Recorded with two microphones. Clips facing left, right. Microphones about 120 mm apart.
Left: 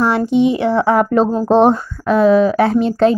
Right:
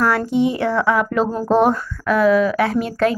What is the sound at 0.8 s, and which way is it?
Speech, 30° left (ahead or behind).